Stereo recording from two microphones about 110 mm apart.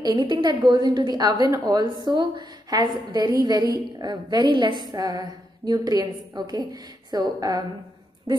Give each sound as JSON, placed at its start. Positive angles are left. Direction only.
{"t": 0.0, "sound": "a woman's voice", "side_deg": -40}